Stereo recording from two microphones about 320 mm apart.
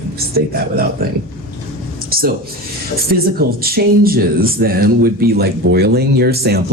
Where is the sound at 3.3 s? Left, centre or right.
Right.